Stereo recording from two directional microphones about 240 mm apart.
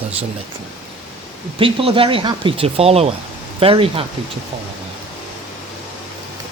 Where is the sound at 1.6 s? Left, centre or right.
Right.